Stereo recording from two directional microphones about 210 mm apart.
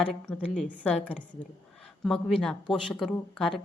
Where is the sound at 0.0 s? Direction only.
5° left (ahead or behind).